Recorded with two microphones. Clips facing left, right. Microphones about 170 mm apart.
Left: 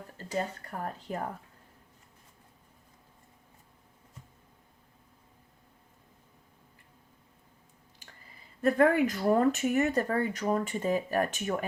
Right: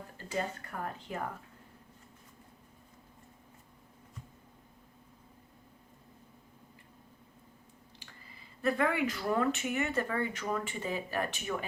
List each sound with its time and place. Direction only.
0.3 s speech: 35° left (ahead or behind)
8.6 s speech: 45° left (ahead or behind)